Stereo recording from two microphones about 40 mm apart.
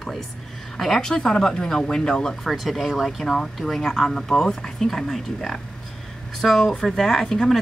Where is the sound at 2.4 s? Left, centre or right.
Centre.